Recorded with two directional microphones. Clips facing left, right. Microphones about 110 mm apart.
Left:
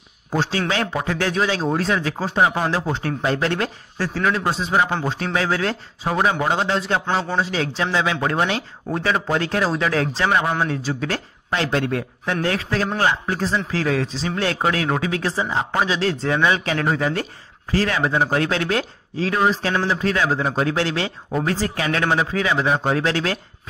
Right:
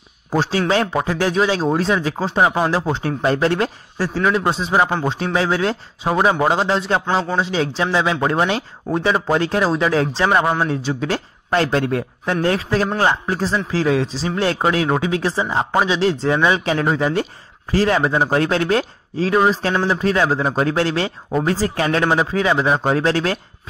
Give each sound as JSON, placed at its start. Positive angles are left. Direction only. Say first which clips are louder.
{"t": 0.3, "sound": "speech", "louder": "right 4 dB", "side_deg": -35}
{"t": 11.5, "sound": "speech", "louder": "right 4 dB", "side_deg": -35}